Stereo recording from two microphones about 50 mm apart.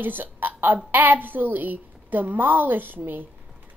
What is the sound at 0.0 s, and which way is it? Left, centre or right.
A woman's voice, right.